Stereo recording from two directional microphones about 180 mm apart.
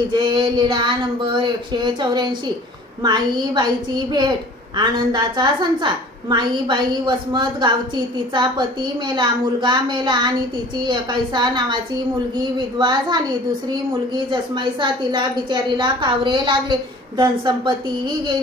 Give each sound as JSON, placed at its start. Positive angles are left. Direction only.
{"t": 0.1, "sound": "a woman's voice", "side_deg": -25}
{"t": 9.1, "sound": "a woman's voice", "side_deg": -25}